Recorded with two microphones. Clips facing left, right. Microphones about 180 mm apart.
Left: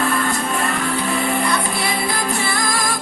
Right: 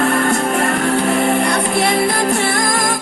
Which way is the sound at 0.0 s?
45° right (ahead or behind).